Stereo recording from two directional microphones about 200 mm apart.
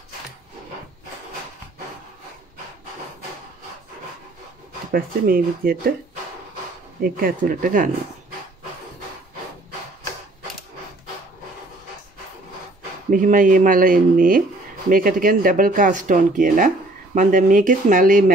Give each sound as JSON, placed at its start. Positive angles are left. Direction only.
{"t": 4.9, "sound": "speech", "side_deg": -45}
{"t": 7.0, "sound": "speech", "side_deg": -45}
{"t": 13.1, "sound": "speech", "side_deg": -40}